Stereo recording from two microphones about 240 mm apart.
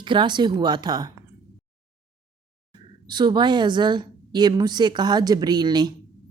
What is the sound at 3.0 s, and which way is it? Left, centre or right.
A woman's voice, centre.